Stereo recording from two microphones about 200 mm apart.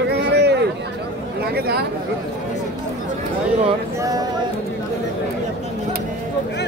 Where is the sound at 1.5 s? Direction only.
55° right (ahead or behind).